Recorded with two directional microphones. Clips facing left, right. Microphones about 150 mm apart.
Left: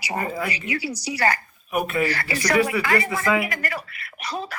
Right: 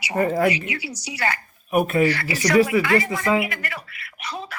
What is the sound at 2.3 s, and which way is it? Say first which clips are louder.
Speech: right 3 dB; 40° right (ahead or behind).